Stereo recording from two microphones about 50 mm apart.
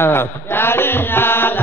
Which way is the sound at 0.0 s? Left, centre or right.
Left.